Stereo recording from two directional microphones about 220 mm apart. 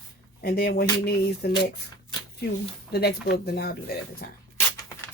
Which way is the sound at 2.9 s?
45° left (ahead or behind).